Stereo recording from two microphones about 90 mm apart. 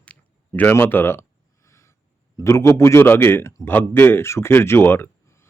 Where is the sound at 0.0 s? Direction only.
15° left (ahead or behind); by 1.9 s 35° left (ahead or behind).